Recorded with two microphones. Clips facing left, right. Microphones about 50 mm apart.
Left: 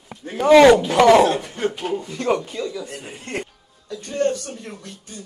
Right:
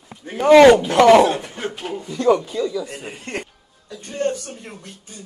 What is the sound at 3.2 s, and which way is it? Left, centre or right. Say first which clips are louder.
Speech: left 2 dB; right.